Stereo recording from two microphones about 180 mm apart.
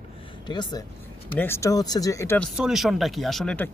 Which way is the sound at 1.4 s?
15° left (ahead or behind).